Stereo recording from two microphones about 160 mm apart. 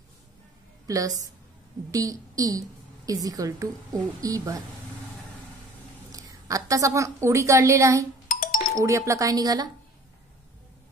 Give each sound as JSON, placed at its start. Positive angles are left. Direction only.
{"t": 0.8, "sound": "a woman's voice", "side_deg": -20}
{"t": 6.1, "sound": "a woman's voice", "side_deg": -20}
{"t": 8.3, "sound": "chink", "side_deg": 60}
{"t": 8.7, "sound": "a woman's voice", "side_deg": -20}